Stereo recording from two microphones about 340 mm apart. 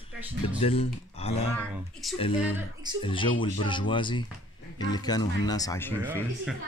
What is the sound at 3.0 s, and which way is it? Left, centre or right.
Speech, centre.